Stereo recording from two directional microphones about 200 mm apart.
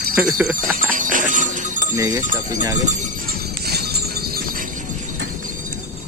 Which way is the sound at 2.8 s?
50° right (ahead or behind).